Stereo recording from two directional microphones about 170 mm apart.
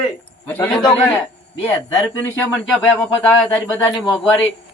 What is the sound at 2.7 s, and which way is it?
Speech, 5° left (ahead or behind).